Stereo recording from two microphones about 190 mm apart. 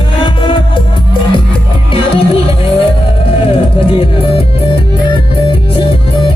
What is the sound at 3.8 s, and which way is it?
Music, 30° left (ahead or behind).